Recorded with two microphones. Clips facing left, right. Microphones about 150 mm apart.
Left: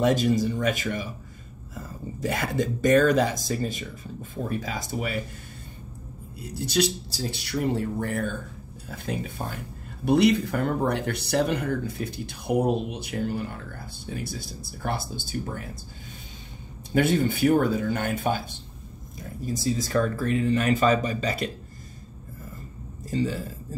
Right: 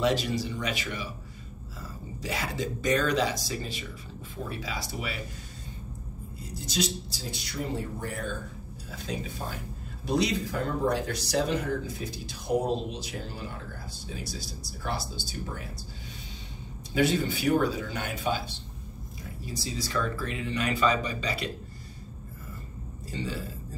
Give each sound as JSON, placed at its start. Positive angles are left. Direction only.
{"t": 0.0, "sound": "speech", "side_deg": 45}
{"t": 6.5, "sound": "speech", "side_deg": 65}
{"t": 16.9, "sound": "speech", "side_deg": 50}
{"t": 23.0, "sound": "a man's voice", "side_deg": 45}